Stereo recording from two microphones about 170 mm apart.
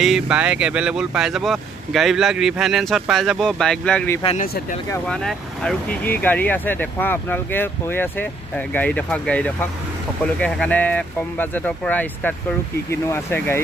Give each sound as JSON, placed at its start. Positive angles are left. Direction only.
{"t": 0.0, "sound": "speech", "side_deg": -5}
{"t": 4.4, "sound": "speech", "side_deg": 50}
{"t": 5.0, "sound": "speech", "side_deg": 5}